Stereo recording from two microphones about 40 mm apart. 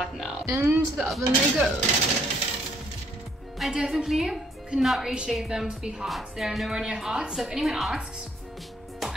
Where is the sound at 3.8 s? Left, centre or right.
Centre.